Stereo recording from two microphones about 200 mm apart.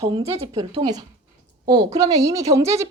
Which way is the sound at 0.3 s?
20° right (ahead or behind).